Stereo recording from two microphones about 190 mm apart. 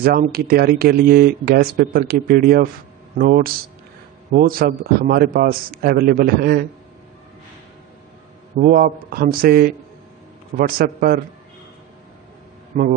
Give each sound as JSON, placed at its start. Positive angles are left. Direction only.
{"t": 0.0, "sound": "speech", "side_deg": -50}
{"t": 8.5, "sound": "speech", "side_deg": -45}
{"t": 10.8, "sound": "speech", "side_deg": -50}
{"t": 12.7, "sound": "speech", "side_deg": -45}